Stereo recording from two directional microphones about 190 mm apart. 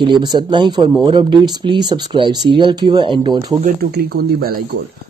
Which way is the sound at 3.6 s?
50° right (ahead or behind).